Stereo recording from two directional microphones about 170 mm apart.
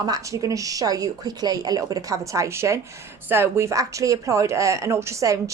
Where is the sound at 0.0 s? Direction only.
20° right (ahead or behind).